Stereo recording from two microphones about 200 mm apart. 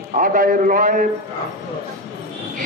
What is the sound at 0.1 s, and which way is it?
Speech, 40° right (ahead or behind).